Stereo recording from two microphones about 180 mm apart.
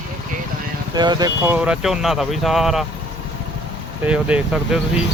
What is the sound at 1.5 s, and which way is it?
Speech, 5° right (ahead or behind).